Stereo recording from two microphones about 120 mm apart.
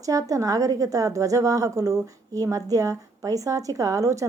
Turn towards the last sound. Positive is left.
turn(degrees=-25)  # may be behind; listen again after turning